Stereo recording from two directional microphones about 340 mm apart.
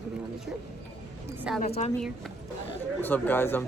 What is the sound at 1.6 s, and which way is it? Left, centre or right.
Speech, left.